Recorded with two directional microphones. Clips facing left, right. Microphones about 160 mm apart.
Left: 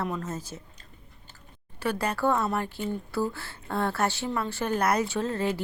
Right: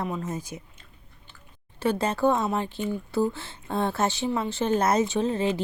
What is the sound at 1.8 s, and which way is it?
A woman's voice, 25° right (ahead or behind).